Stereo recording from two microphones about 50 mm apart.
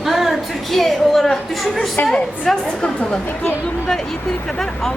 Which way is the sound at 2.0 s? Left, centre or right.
Centre.